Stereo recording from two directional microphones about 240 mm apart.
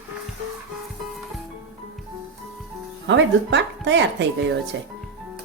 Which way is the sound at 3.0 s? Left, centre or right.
Right.